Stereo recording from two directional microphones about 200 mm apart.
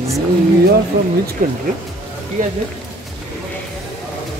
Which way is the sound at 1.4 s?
45° right (ahead or behind).